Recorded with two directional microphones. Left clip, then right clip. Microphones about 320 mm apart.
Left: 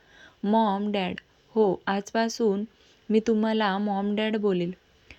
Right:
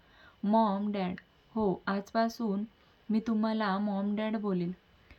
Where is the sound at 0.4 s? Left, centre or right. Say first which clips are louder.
Left 4 dB; centre.